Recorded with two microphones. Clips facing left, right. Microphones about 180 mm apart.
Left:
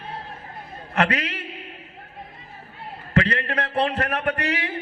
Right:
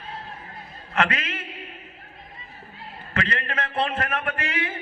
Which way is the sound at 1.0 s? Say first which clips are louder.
Left 2 dB; 35° left (ahead or behind).